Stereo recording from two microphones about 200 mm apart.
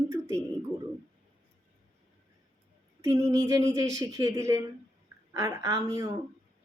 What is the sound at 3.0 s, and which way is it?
Speech, 15° right (ahead or behind).